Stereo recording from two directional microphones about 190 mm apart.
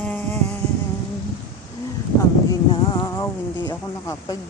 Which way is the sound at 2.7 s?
20° left (ahead or behind).